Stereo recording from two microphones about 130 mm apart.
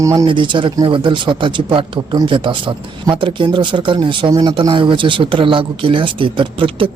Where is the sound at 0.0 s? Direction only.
25° right (ahead or behind).